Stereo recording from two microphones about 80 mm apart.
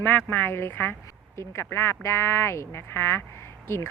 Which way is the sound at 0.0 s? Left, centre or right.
Left.